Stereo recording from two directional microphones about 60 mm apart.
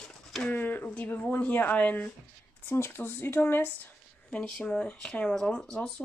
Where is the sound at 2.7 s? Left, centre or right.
Left.